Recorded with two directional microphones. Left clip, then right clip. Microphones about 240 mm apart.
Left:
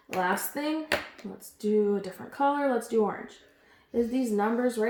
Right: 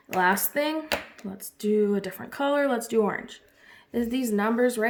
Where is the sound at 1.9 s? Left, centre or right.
Right.